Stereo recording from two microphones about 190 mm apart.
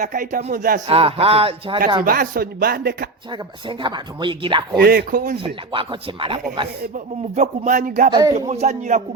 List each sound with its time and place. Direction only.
0.0 s speech: 45° right (ahead or behind)
0.9 s speech: 30° right (ahead or behind)
2.0 s speech: 50° right (ahead or behind)
3.3 s speech: 25° right (ahead or behind)
4.8 s speech: 50° right (ahead or behind)
5.7 s speech: 25° right (ahead or behind)
6.9 s speech: 40° right (ahead or behind)
8.1 s speech: 20° right (ahead or behind)
8.4 s speech: 35° right (ahead or behind)